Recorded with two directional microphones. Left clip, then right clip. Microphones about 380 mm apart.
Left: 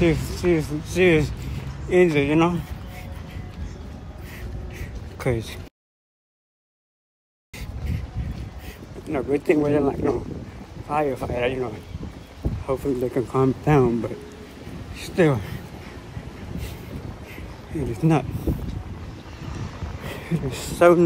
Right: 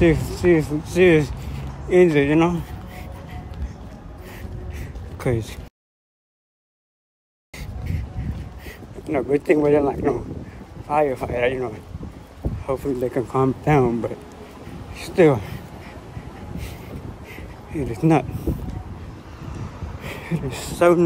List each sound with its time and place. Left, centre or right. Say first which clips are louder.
0.0 s speech: right 4 dB; centre
4.7 s a sound: left 1 dB; centre
8.6 s speech: right 4 dB; centre
17.3 s a sound: right 1 dB; centre
19.4 s vehicle: left 1 dB; right
20.0 s speech: right 1 dB; centre